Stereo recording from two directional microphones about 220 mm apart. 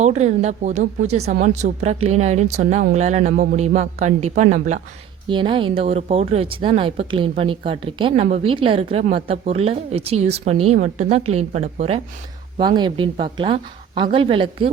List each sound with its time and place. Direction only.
0.0 s speech: 30° right (ahead or behind)
5.3 s speech: 20° right (ahead or behind)